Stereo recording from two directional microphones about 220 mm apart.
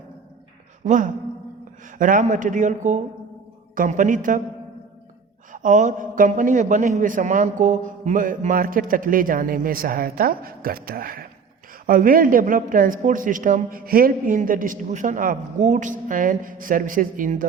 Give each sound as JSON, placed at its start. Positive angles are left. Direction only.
{"t": 0.9, "sound": "a man's voice", "side_deg": -35}
{"t": 5.5, "sound": "a man's voice", "side_deg": -35}